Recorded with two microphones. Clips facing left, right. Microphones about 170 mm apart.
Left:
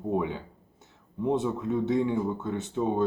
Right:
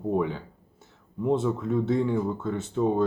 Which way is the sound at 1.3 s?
15° left (ahead or behind).